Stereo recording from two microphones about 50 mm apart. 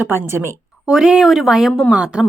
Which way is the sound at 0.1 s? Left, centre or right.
Right.